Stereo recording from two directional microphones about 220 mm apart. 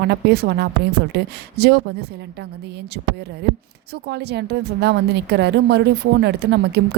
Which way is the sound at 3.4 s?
50° right (ahead or behind).